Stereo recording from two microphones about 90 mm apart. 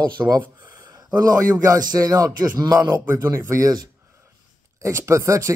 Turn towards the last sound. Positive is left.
turn(degrees=-35)  # may be behind; listen again after turning